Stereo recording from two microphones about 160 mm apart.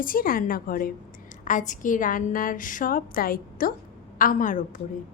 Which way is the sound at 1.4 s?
50° left (ahead or behind).